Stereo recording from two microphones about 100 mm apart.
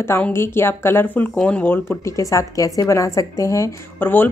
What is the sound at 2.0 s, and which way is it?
A woman's voice, 30° left (ahead or behind).